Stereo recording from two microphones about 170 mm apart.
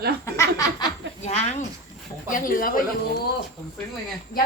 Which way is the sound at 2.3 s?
55° left (ahead or behind).